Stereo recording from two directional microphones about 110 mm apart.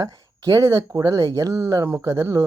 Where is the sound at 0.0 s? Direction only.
30° right (ahead or behind).